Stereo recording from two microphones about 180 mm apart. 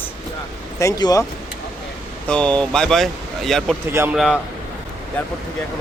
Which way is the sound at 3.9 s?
10° right (ahead or behind).